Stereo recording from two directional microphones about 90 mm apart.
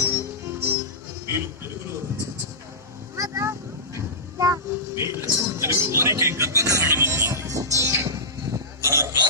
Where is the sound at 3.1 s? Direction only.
35° right (ahead or behind).